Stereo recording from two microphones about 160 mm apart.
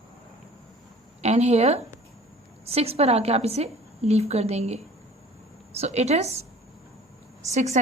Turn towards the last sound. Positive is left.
turn(degrees=-45)  # may be behind; listen again after turning